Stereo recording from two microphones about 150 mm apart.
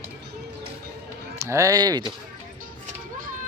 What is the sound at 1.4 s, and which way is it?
Speech, 20° right (ahead or behind).